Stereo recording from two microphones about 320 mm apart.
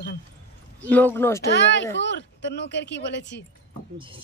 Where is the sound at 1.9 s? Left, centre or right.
Left.